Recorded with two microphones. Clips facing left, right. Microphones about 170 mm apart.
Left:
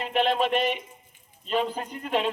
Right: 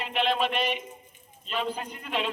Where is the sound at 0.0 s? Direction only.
45° left (ahead or behind).